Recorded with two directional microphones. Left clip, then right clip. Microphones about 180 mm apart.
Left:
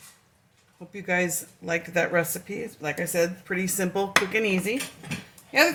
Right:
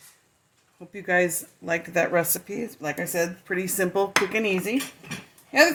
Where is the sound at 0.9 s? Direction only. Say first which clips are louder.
Right 3 dB; 55° right (ahead or behind).